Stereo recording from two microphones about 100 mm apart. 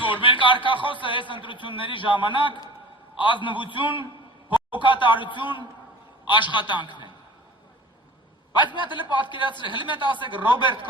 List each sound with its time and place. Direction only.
0.2 s a man's voice: 55° left (ahead or behind)
8.5 s a woman's voice: 50° left (ahead or behind)